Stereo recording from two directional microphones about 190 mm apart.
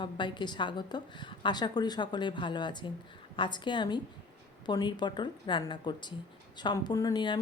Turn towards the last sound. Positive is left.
turn(degrees=25)  # may be behind; listen again after turning